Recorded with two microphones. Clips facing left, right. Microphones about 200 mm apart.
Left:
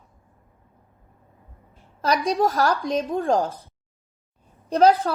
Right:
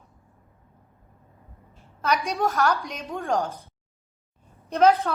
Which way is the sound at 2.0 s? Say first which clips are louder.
Left 4 dB; 35° left (ahead or behind).